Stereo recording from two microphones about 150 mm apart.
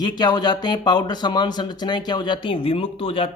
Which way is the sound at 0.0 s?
30° left (ahead or behind).